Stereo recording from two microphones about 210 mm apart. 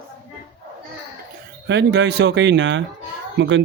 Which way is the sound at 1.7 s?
55° right (ahead or behind).